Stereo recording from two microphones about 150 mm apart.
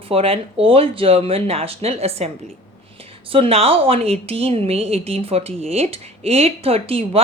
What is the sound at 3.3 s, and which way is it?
Speech, 40° right (ahead or behind).